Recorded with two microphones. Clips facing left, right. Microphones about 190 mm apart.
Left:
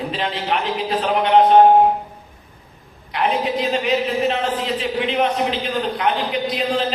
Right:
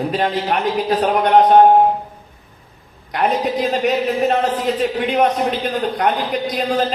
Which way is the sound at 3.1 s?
45° right (ahead or behind).